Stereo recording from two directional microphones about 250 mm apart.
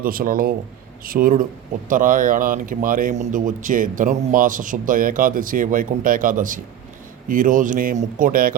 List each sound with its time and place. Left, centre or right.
0.0 s a man's voice: right